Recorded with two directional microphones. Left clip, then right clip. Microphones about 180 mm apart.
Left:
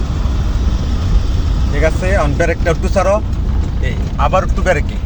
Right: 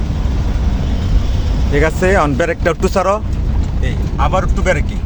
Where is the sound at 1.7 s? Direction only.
55° right (ahead or behind).